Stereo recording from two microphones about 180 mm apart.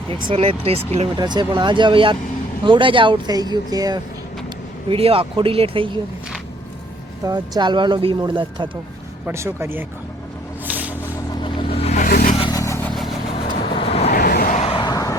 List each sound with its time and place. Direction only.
0.3 s speech: 30° right (ahead or behind)
1.2 s speech: 25° right (ahead or behind)
4.4 s speech: 30° right (ahead or behind)
7.3 s speech: 25° right (ahead or behind)
9.2 s speech: 15° right (ahead or behind)
10.7 s a sound: 10° right (ahead or behind)
11.3 s music: 25° left (ahead or behind)
12.0 s vehicle: 50° left (ahead or behind)
12.4 s vehicle: 20° left (ahead or behind)
12.9 s vehicle: centre (ahead or behind)
13.7 s vehicle: 30° left (ahead or behind)
14.1 s vehicle: 55° left (ahead or behind)
14.5 s vehicle: 30° left (ahead or behind)